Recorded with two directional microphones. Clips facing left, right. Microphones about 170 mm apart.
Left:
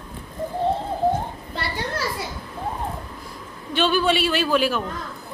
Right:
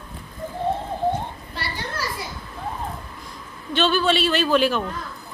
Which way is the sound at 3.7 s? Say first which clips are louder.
Even; 10° left (ahead or behind).